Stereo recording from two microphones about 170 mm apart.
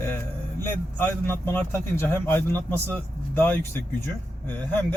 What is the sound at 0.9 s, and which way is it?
Speech, 15° left (ahead or behind).